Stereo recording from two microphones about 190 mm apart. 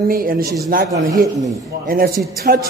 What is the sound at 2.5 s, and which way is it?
Speech, 50° right (ahead or behind).